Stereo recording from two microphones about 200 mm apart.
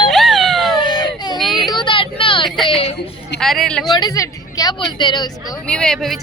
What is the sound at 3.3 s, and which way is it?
Speech, centre (ahead or behind).